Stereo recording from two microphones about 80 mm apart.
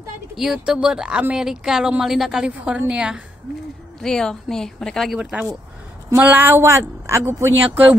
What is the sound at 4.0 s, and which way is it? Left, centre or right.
A woman's voice, centre.